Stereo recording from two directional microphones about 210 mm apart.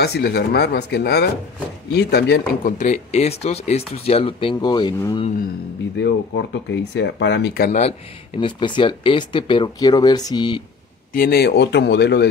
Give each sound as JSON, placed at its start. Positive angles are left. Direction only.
{"t": 0.0, "sound": "speech", "side_deg": 50}
{"t": 2.8, "sound": "speech", "side_deg": 35}
{"t": 5.9, "sound": "speech", "side_deg": 55}
{"t": 8.4, "sound": "speech", "side_deg": 20}
{"t": 11.1, "sound": "speech", "side_deg": 50}